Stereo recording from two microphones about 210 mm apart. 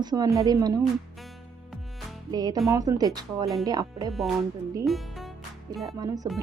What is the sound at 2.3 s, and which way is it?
A woman's voice, 20° right (ahead or behind).